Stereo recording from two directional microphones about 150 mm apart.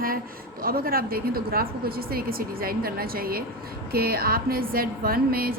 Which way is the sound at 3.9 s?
90° right.